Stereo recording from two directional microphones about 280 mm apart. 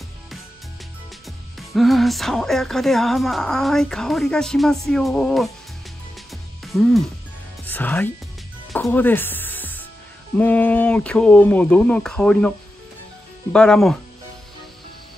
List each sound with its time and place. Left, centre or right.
1.2 s speech: centre
6.3 s music: centre
7.6 s speech: centre
8.7 s music: centre
10.3 s speech: centre